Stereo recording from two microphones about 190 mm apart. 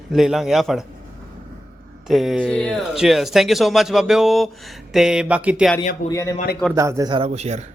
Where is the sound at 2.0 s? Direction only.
Centre (ahead or behind).